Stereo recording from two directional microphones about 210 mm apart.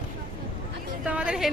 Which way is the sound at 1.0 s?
5° right (ahead or behind).